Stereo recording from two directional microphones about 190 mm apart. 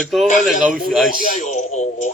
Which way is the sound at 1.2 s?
40° left (ahead or behind).